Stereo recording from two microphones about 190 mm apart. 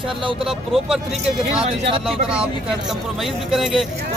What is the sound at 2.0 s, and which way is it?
Speech, 5° right (ahead or behind).